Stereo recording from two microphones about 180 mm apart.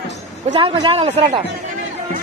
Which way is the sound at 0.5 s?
25° right (ahead or behind).